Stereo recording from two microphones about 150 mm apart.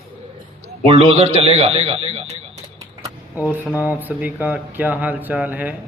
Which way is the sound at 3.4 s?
10° right (ahead or behind).